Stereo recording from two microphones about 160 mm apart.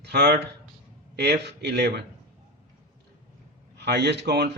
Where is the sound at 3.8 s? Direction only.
90° right.